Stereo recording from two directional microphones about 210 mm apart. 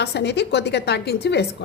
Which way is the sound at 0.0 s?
55° left (ahead or behind).